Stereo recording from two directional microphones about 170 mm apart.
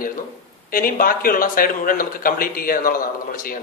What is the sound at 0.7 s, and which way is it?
Speech, 55° left (ahead or behind).